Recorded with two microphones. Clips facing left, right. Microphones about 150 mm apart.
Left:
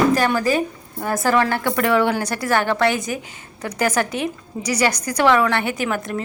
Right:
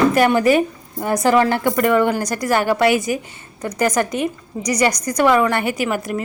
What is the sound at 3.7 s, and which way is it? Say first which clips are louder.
A woman's voice: right 2 dB; 5° left (ahead or behind).